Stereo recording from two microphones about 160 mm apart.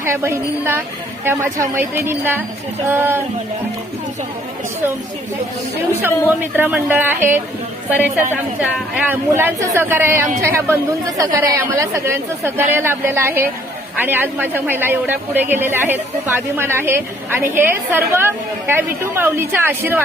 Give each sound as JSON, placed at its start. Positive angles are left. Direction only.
{"t": 0.0, "sound": "speech", "side_deg": -15}
{"t": 6.0, "sound": "speech", "side_deg": -10}